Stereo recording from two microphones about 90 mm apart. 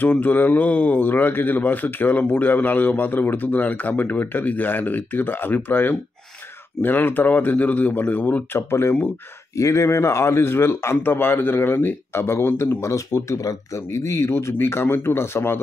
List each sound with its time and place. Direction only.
0.0 s speech: 20° left (ahead or behind)